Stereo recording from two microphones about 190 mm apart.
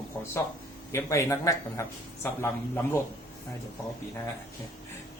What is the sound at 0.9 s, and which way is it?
Speech, 15° left (ahead or behind).